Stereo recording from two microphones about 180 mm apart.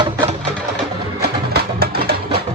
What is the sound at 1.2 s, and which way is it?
Music, 60° right (ahead or behind).